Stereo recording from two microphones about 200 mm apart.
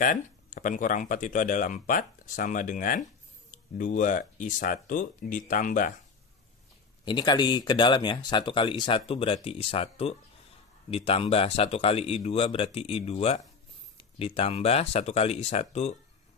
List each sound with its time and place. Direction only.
0.0 s speech: 40° left (ahead or behind)
7.1 s speech: 20° left (ahead or behind)